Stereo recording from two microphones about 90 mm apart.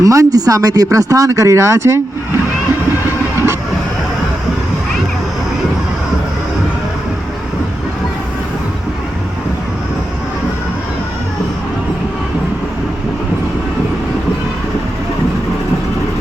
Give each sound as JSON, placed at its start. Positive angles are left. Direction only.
{"t": 0.0, "sound": "speech", "side_deg": -40}